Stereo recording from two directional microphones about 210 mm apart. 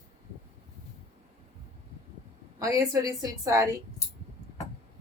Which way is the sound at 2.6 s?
15° right (ahead or behind).